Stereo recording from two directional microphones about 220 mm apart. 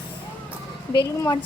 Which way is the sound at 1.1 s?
15° left (ahead or behind).